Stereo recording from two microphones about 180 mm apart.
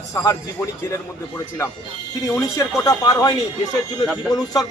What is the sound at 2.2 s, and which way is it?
Speech, 15° left (ahead or behind).